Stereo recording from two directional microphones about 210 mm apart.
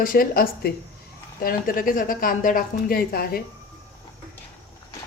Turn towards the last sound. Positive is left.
turn(degrees=45)  # may be behind; listen again after turning